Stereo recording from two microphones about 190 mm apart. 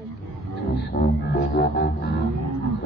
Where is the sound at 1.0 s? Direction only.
55° left (ahead or behind).